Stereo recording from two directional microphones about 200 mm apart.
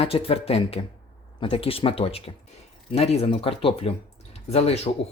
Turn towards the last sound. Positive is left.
turn(degrees=30)  # may be behind; listen again after turning